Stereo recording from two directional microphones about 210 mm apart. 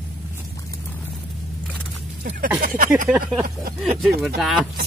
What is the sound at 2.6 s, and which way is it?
Speech, 40° right (ahead or behind).